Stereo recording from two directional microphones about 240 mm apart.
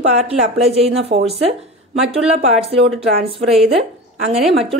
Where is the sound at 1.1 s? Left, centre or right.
Right.